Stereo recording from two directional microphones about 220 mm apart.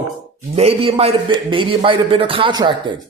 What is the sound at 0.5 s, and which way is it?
A man's voice, 25° right (ahead or behind).